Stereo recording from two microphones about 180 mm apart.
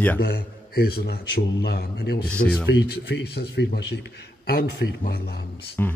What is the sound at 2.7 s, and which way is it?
A man's voice, 70° left (ahead or behind).